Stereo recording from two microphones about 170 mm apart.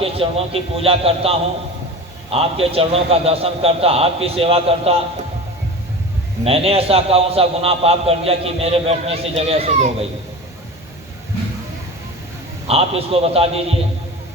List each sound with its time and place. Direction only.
0.0 s a man's voice: 35° right (ahead or behind)
6.4 s a man's voice: 35° right (ahead or behind)
12.6 s a man's voice: 35° right (ahead or behind)